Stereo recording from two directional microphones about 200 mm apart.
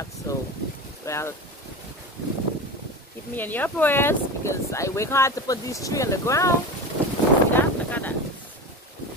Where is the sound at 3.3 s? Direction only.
10° left (ahead or behind).